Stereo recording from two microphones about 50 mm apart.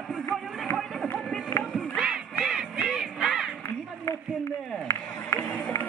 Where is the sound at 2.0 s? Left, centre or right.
Centre.